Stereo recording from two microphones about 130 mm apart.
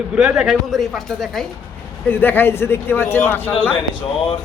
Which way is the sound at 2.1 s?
15° left (ahead or behind).